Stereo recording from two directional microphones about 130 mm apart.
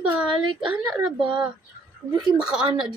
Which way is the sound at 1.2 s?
40° right (ahead or behind).